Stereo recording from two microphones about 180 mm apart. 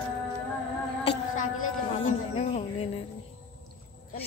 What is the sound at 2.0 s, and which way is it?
Speech, 35° left (ahead or behind).